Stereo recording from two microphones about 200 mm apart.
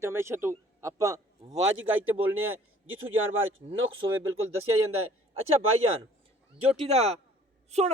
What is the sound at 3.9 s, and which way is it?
Speech, 25° right (ahead or behind).